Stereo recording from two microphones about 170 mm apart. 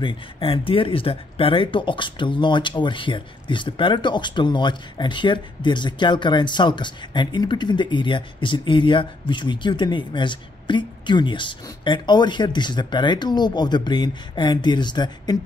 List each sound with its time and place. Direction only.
0.0 s speech: 30° left (ahead or behind)